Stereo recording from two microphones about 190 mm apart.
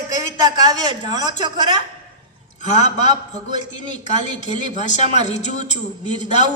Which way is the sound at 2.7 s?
35° left (ahead or behind).